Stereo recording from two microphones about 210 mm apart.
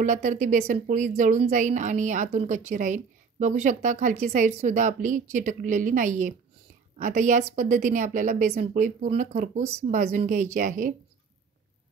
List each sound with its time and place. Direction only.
0.0 s a woman's voice: 35° right (ahead or behind)